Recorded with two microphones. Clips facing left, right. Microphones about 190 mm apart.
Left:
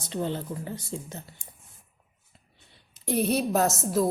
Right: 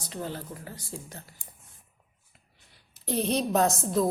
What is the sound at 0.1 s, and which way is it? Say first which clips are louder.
Speech: left 6 dB; 25° left (ahead or behind).